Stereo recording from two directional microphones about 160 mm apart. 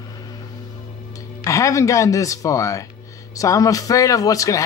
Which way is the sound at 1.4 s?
20° left (ahead or behind).